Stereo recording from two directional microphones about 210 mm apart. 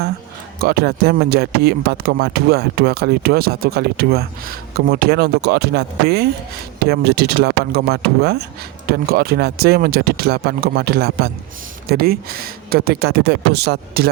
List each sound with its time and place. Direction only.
0.6 s speech: 45° right (ahead or behind)